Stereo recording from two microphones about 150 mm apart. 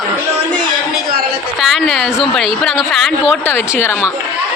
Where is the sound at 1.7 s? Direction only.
Centre (ahead or behind).